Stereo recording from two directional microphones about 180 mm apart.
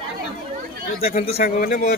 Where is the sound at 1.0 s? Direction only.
35° left (ahead or behind).